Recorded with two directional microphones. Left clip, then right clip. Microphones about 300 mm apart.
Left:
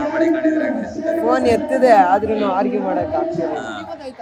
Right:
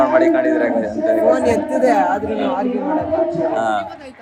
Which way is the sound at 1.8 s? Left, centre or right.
Centre.